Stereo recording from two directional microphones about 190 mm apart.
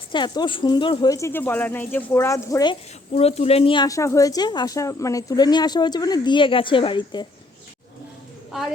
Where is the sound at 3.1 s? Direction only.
35° left (ahead or behind).